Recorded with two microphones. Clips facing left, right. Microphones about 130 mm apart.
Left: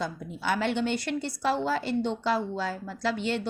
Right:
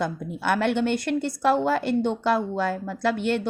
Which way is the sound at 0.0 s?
60° right (ahead or behind).